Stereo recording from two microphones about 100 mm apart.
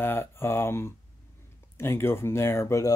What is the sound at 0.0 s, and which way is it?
Speech, 25° left (ahead or behind).